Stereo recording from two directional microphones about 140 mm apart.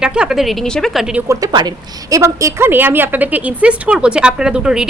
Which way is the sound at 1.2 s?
30° right (ahead or behind).